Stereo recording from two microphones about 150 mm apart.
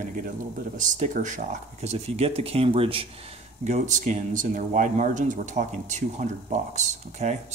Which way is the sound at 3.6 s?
55° right (ahead or behind).